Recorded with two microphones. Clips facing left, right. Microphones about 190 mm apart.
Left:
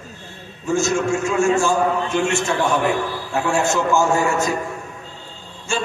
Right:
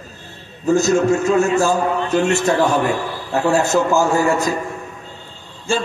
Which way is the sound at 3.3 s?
35° right (ahead or behind).